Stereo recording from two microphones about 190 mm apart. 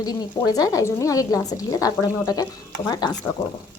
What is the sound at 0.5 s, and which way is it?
A woman's voice, 20° left (ahead or behind).